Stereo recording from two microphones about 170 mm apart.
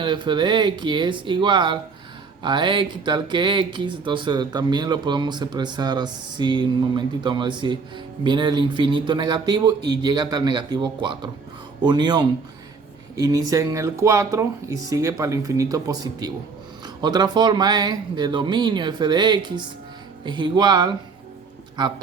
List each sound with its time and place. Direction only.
0.0 s speech: 30° right (ahead or behind)